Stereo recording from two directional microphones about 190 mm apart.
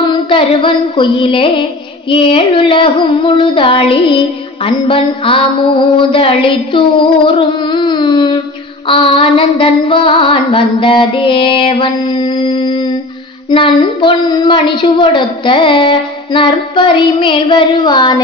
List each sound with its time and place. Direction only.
0.0 s music: 25° left (ahead or behind)